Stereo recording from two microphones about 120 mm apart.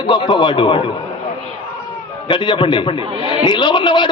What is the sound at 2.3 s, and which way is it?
A man's voice, 45° left (ahead or behind).